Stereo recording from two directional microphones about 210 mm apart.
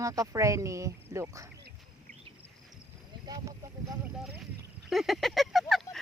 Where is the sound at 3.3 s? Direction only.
15° right (ahead or behind).